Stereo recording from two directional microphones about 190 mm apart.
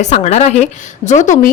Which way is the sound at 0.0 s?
35° left (ahead or behind).